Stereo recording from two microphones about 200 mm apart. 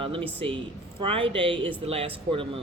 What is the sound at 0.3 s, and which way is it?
Speech, 25° right (ahead or behind).